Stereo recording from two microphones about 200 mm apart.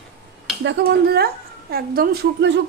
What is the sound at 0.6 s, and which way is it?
A woman's voice, 60° right (ahead or behind).